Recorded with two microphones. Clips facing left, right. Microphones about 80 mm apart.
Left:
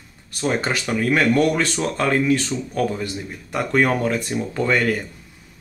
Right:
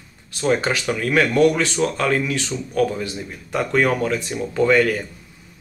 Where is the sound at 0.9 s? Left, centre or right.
Left.